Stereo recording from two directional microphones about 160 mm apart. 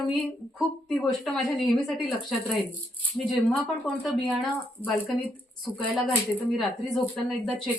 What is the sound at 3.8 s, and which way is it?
Speech, 10° left (ahead or behind).